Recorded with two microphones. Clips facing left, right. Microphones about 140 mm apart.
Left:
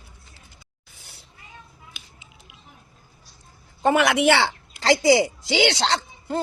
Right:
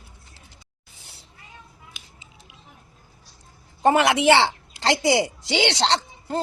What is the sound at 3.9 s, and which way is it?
Speech, 30° right (ahead or behind).